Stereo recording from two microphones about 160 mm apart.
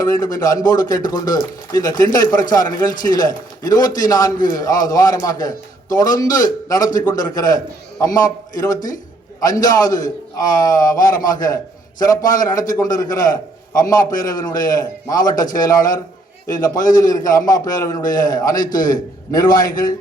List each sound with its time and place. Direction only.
0.0 s a man's voice: 20° left (ahead or behind)